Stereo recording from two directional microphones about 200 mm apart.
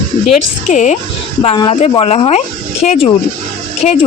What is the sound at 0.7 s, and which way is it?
Speech, 40° left (ahead or behind).